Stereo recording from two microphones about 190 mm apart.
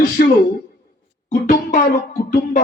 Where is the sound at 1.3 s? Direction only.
50° left (ahead or behind).